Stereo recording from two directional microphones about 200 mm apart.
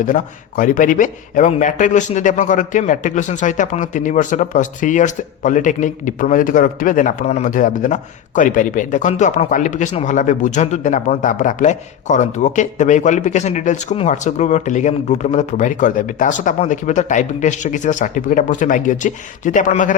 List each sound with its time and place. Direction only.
0.0 s a man's voice: 40° left (ahead or behind)